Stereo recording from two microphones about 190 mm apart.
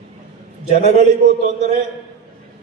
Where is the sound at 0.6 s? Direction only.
35° left (ahead or behind).